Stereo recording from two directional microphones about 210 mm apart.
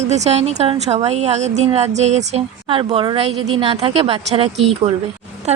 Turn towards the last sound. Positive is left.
turn(degrees=-30)  # may be behind; listen again after turning